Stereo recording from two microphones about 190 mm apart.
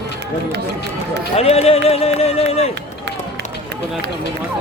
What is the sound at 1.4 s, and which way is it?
Speech, 30° left (ahead or behind).